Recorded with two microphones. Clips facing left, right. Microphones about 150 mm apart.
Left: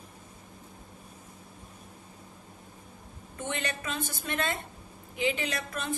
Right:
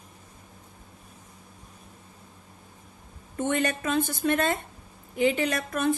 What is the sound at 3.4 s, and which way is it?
Speech, 50° right (ahead or behind).